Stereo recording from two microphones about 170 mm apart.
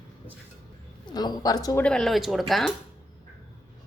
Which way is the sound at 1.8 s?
5° left (ahead or behind).